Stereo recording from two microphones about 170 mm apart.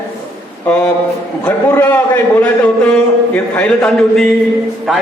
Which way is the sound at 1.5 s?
10° left (ahead or behind).